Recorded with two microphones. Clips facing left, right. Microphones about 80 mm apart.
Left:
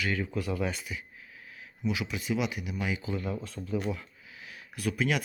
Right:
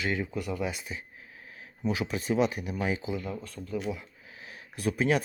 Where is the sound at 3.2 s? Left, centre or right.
Centre.